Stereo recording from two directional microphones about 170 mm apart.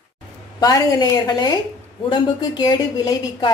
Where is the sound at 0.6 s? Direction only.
20° left (ahead or behind).